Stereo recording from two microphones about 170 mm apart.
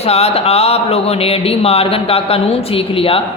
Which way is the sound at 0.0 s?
35° left (ahead or behind).